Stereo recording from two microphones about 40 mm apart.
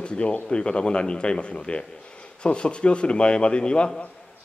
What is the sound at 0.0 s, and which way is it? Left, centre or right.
A man's voice, left.